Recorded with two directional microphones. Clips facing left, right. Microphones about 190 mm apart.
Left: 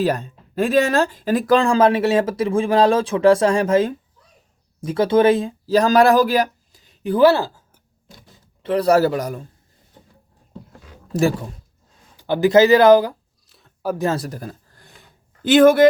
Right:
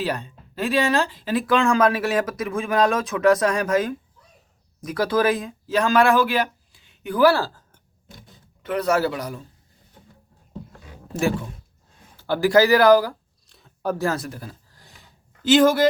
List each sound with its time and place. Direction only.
0.0 s speech: 45° left (ahead or behind); by 7.5 s 20° left (ahead or behind)
8.6 s speech: 30° left (ahead or behind)
11.1 s speech: 35° left (ahead or behind)
12.1 s speech: 20° left (ahead or behind)
13.5 s a sound: centre (ahead or behind)
14.0 s speech: 25° left (ahead or behind)
14.3 s a sound: 45° left (ahead or behind)
15.4 s speech: 55° left (ahead or behind)